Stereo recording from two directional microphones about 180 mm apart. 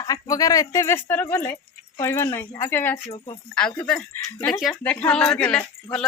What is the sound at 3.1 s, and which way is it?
Speech, 35° left (ahead or behind).